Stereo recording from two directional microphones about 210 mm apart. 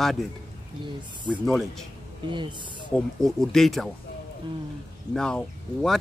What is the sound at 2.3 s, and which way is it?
Speech, 20° right (ahead or behind).